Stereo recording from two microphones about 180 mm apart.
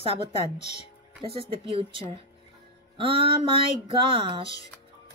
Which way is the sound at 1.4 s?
30° right (ahead or behind).